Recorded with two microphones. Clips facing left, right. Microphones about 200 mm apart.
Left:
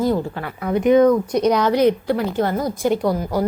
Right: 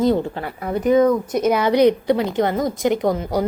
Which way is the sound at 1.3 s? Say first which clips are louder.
Even; 5° right (ahead or behind).